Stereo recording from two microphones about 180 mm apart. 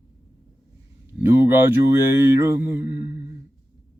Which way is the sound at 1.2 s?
10° right (ahead or behind).